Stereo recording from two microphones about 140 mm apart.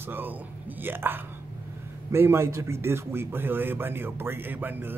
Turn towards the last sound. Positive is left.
turn(degrees=-15)  # may be behind; listen again after turning